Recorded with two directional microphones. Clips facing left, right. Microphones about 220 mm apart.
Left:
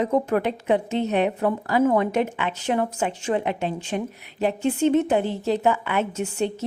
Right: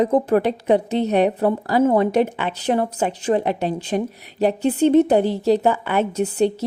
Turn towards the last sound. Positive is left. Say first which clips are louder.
# right 6 dB
turn(degrees=-35)  # may be behind; listen again after turning